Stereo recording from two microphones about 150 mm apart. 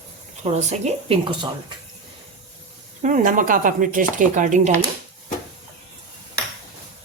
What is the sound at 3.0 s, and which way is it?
Speech, 55° right (ahead or behind).